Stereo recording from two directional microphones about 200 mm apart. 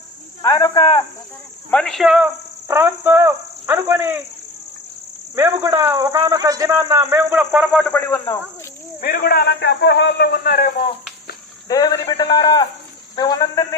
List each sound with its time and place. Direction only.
0.4 s a man's voice: 20° left (ahead or behind)
1.7 s speech: centre (ahead or behind); by 4.2 s 15° right (ahead or behind)
5.3 s speech: 15° right (ahead or behind); by 8.3 s 10° left (ahead or behind)
9.0 s a man's voice: 50° left (ahead or behind)
11.7 s a man's voice: 20° left (ahead or behind)